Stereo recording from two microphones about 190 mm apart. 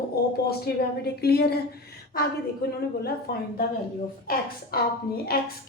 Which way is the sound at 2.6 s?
55° left (ahead or behind).